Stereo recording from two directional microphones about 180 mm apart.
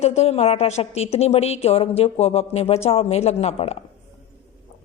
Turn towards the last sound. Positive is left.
turn(degrees=35)  # may be behind; listen again after turning